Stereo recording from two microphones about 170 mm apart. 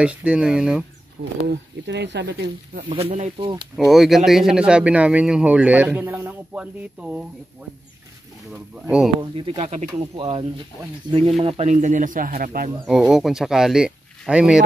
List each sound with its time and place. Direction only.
0.0 s speech: 5° right (ahead or behind)
1.2 s speech: 75° right (ahead or behind)
1.5 s speech: 90° right
2.9 s speech: 35° right (ahead or behind)
3.9 s a man's voice: centre (ahead or behind)
8.8 s speech: 5° right (ahead or behind)
9.2 s speech: 30° right (ahead or behind)
11.4 s speech: 40° right (ahead or behind); by 12.7 s 60° right (ahead or behind)
12.8 s speech: 5° right (ahead or behind)